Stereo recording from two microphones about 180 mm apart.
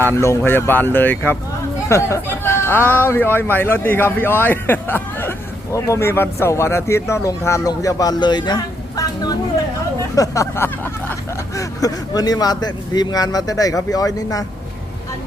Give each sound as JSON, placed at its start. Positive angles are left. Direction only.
{"t": 0.0, "sound": "speech", "side_deg": 15}